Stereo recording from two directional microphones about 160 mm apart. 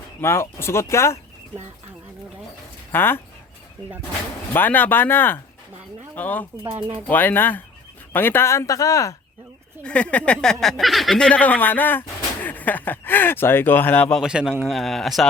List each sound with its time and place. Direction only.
0.2 s speech: 15° left (ahead or behind)
2.9 s speech: 15° left (ahead or behind)
4.5 s speech: 10° left (ahead or behind)
9.8 s speech: 5° left (ahead or behind)
14.2 s a man's voice: 5° right (ahead or behind)